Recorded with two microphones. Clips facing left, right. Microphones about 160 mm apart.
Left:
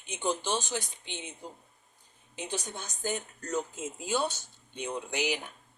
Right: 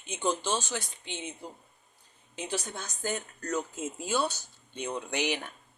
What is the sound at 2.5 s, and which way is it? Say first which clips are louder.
Speech: right 2 dB; 20° left (ahead or behind).